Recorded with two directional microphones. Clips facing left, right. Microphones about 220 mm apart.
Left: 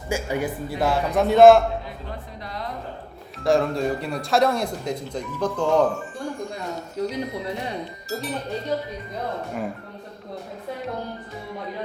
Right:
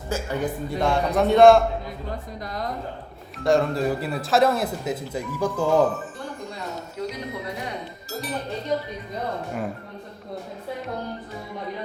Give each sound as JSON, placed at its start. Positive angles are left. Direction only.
{"t": 0.1, "sound": "speech", "side_deg": 10}
{"t": 3.3, "sound": "speech", "side_deg": 0}
{"t": 7.0, "sound": "music", "side_deg": 35}
{"t": 8.1, "sound": "speech", "side_deg": 0}